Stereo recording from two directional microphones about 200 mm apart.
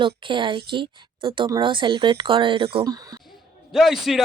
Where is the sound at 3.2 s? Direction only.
Centre (ahead or behind).